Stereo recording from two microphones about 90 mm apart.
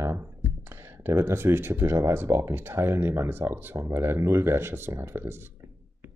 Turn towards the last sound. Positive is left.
turn(degrees=-25)  # may be behind; listen again after turning